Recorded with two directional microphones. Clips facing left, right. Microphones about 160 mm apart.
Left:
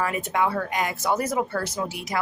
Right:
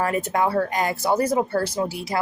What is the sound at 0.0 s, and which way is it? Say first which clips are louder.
Speech: right 3 dB; 40° right (ahead or behind).